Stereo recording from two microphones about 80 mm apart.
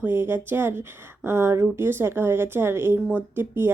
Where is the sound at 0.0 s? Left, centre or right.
Right.